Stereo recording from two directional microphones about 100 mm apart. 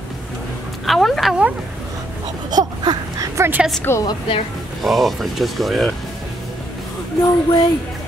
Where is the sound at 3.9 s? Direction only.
25° left (ahead or behind).